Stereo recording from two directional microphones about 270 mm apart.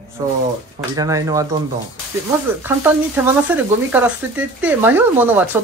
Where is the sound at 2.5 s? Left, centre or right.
Centre.